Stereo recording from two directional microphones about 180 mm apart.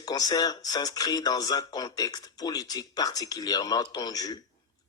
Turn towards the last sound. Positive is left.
turn(degrees=20)  # may be behind; listen again after turning